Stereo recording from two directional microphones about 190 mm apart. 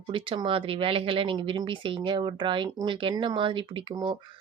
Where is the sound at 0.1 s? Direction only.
25° right (ahead or behind).